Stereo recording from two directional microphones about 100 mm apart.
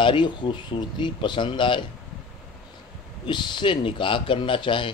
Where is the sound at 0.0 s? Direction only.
55° left (ahead or behind).